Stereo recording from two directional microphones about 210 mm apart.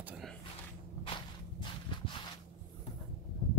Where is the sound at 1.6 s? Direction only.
25° left (ahead or behind).